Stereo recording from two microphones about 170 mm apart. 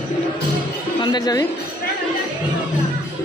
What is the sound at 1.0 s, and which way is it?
Music, 25° left (ahead or behind).